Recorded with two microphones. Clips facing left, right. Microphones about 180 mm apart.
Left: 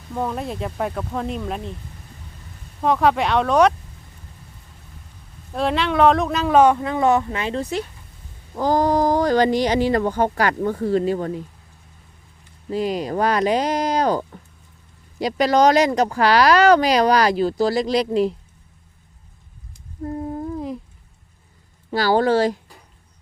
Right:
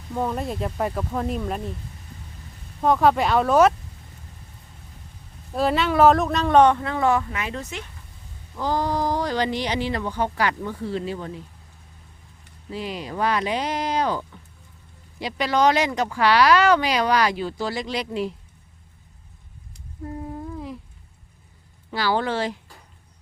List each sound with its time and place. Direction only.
0.1 s speech: centre (ahead or behind)
2.8 s speech: centre (ahead or behind)
5.5 s speech: centre (ahead or behind); by 7.9 s 35° left (ahead or behind)
8.5 s speech: 45° left (ahead or behind)
12.7 s speech: 45° left (ahead or behind)
20.1 s lullaby: 40° left (ahead or behind)
21.8 s speech: 40° left (ahead or behind)